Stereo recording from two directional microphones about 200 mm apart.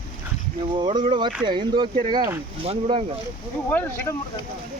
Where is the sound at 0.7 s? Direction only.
25° right (ahead or behind).